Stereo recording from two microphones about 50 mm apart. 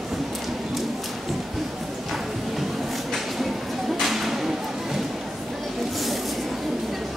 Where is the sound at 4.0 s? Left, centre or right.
Centre.